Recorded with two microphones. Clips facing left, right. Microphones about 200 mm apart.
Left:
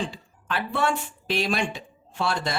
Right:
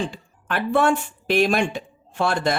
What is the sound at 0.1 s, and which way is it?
Speech, 50° right (ahead or behind).